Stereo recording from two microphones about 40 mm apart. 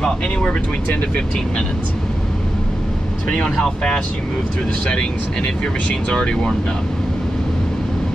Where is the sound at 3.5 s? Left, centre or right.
Centre.